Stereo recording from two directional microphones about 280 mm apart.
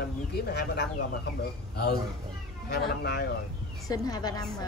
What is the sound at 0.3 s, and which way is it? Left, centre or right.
Speech, left.